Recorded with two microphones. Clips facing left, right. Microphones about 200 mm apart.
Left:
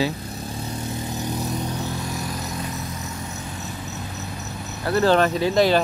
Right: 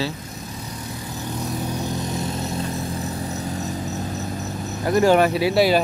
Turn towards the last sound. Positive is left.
turn(degrees=-10)  # may be behind; listen again after turning